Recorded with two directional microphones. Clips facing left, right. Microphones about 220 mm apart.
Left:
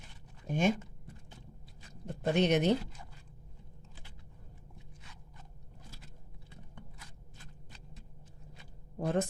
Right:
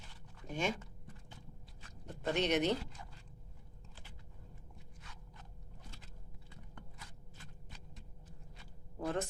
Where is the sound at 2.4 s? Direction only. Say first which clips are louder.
Left 5 dB; 50° left (ahead or behind).